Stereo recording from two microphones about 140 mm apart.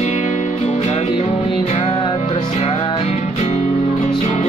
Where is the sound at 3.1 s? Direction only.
55° left (ahead or behind).